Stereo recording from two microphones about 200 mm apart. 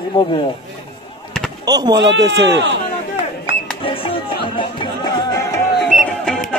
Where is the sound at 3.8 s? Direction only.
25° left (ahead or behind).